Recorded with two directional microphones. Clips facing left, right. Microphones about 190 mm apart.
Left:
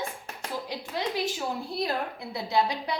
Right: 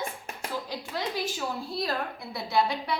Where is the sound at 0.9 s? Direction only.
20° left (ahead or behind).